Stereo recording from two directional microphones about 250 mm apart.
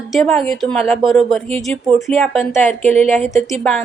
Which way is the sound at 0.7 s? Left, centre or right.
Right.